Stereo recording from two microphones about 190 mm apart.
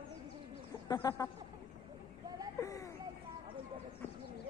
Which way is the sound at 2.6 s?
15° left (ahead or behind).